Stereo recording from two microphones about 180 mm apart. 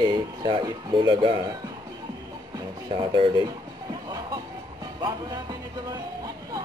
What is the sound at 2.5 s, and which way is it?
Speech, 25° right (ahead or behind).